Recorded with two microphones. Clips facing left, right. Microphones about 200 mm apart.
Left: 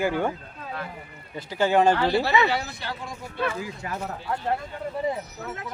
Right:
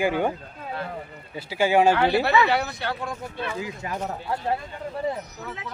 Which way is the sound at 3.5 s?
25° right (ahead or behind).